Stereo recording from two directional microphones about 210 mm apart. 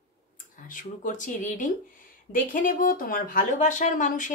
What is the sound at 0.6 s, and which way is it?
Speech, 40° left (ahead or behind).